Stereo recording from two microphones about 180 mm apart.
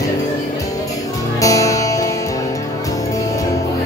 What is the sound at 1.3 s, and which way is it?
Music, 20° left (ahead or behind).